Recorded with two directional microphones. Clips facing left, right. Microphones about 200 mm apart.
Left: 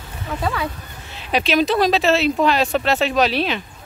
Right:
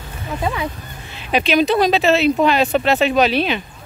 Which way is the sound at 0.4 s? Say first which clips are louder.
Right 1 dB; 20° right (ahead or behind).